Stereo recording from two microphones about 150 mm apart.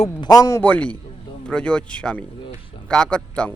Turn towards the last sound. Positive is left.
turn(degrees=5)  # may be behind; listen again after turning